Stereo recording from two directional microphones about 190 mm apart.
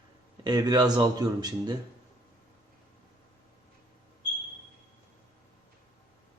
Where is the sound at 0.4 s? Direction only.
20° right (ahead or behind).